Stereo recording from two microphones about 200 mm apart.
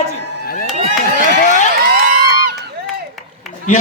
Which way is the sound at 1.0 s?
40° left (ahead or behind).